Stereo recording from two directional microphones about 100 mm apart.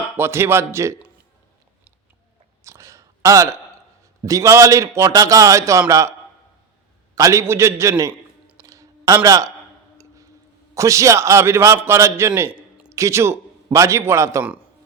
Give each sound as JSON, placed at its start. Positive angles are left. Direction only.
{"t": 0.2, "sound": "a man's voice", "side_deg": -25}
{"t": 2.6, "sound": "a sound", "side_deg": -30}
{"t": 4.3, "sound": "a man's voice", "side_deg": -30}
{"t": 7.2, "sound": "a man's voice", "side_deg": -30}
{"t": 8.6, "sound": "a sound", "side_deg": -35}
{"t": 9.2, "sound": "a man's voice", "side_deg": -35}
{"t": 10.8, "sound": "a man's voice", "side_deg": -30}
{"t": 12.5, "sound": "a sound", "side_deg": -15}
{"t": 12.9, "sound": "a man's voice", "side_deg": -30}